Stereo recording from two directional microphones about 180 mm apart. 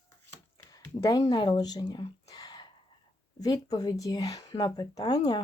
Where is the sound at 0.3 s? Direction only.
20° left (ahead or behind).